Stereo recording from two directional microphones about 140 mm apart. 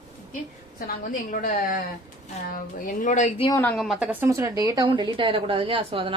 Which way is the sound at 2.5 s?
65° left (ahead or behind).